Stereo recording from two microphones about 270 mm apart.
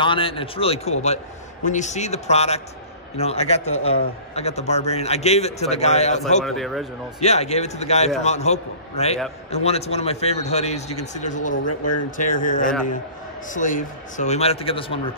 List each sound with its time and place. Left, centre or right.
0.0 s a man's voice: centre
6.4 s speech: centre
7.2 s a man's voice: left
11.6 s speech: left
12.2 s a man's voice: left